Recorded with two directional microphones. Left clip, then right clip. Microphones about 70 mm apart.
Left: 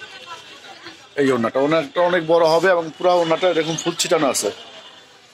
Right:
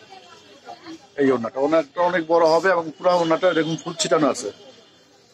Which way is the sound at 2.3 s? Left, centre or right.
Centre.